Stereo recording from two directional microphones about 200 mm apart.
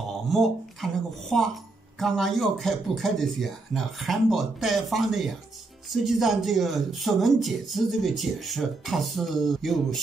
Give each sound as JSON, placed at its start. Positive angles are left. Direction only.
{"t": 0.3, "sound": "speech", "side_deg": 0}